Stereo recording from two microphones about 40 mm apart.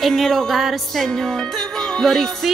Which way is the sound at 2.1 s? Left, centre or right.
Centre.